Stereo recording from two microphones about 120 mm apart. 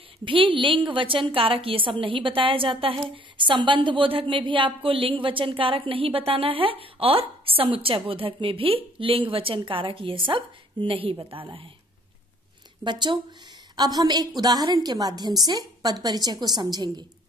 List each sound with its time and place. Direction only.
0.2 s a woman's voice: 45° right (ahead or behind)
12.8 s a woman's voice: 40° right (ahead or behind)